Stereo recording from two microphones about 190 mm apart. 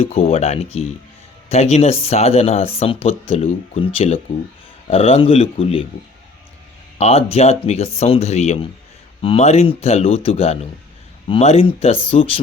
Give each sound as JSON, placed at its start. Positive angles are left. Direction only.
{"t": 0.0, "sound": "speech", "side_deg": 30}
{"t": 7.0, "sound": "speech", "side_deg": 30}